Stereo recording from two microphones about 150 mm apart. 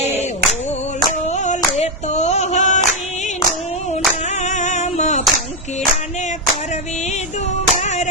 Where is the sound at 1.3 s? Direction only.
50° left (ahead or behind).